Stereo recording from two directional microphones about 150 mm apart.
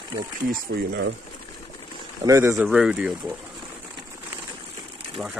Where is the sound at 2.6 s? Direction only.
5° right (ahead or behind).